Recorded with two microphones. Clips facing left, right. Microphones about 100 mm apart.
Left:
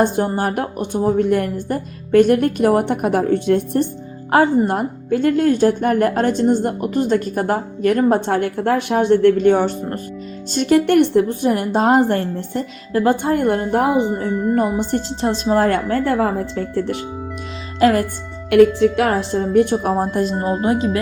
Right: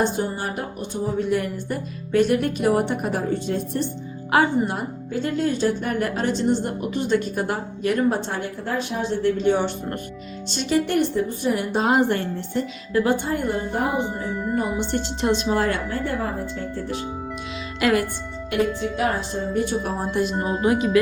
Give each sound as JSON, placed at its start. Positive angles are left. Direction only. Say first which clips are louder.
{"t": 0.0, "sound": "speech", "louder": "left 6 dB", "side_deg": 55}
{"t": 4.3, "sound": "a woman's voice", "louder": "left 5 dB", "side_deg": 45}
{"t": 14.2, "sound": "music", "louder": "left 7 dB", "side_deg": 0}
{"t": 14.8, "sound": "a woman's voice", "louder": "left 2 dB", "side_deg": 35}
{"t": 16.0, "sound": "speech", "louder": "left 8 dB", "side_deg": 90}
{"t": 17.7, "sound": "speech", "louder": "left 6 dB", "side_deg": 35}
{"t": 18.5, "sound": "a woman's voice", "louder": "left 11 dB", "side_deg": 80}
{"t": 19.7, "sound": "a woman's voice", "louder": "left 7 dB", "side_deg": 50}
{"t": 20.7, "sound": "a woman's voice", "louder": "right 1 dB", "side_deg": 30}